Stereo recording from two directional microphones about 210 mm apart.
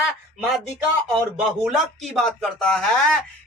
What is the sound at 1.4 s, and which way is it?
A man's voice, 5° right (ahead or behind).